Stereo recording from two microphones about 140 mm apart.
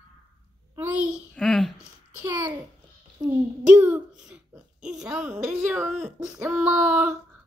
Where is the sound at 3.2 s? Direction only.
30° right (ahead or behind).